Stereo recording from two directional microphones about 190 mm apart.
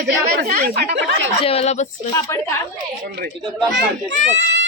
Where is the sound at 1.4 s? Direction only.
30° left (ahead or behind).